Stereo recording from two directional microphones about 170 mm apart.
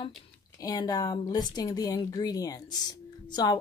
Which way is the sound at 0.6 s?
20° left (ahead or behind).